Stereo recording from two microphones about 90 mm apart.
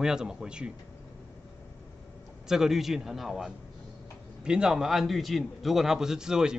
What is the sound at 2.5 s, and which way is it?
A man's voice, 5° right (ahead or behind).